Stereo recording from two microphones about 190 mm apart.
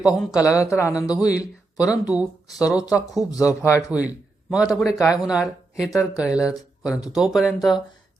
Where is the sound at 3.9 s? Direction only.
5° right (ahead or behind).